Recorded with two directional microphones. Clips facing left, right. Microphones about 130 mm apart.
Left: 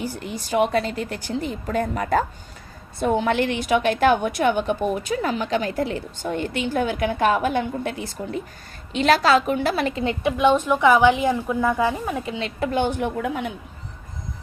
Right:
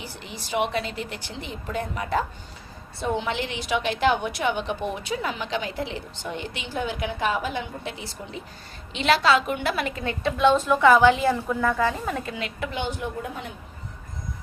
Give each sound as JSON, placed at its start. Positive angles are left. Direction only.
{"t": 0.0, "sound": "a woman's voice", "side_deg": 45}
{"t": 10.0, "sound": "a woman's voice", "side_deg": 20}
{"t": 12.3, "sound": "a woman's voice", "side_deg": 35}
{"t": 13.1, "sound": "a woman's voice", "side_deg": 80}